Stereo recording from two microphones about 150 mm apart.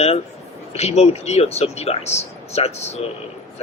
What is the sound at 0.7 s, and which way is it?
A man's voice, 45° left (ahead or behind).